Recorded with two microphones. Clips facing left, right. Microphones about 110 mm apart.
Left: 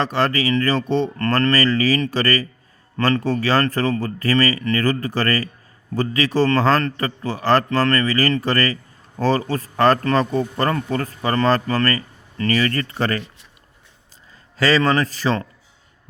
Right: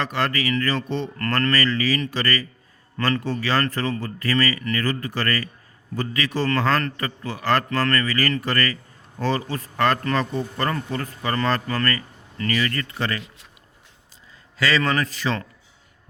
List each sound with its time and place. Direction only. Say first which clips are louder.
0.0 s a man's voice: left 4 dB; 30° left (ahead or behind)
14.6 s a man's voice: left 4 dB; 35° left (ahead or behind)